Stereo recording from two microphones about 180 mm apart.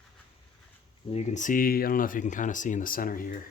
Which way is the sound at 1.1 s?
40° left (ahead or behind).